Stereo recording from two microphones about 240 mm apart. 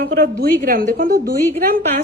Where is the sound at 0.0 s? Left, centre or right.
Right.